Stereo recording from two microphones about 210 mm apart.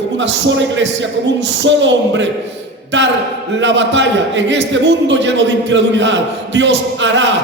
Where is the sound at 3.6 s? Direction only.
60° right (ahead or behind).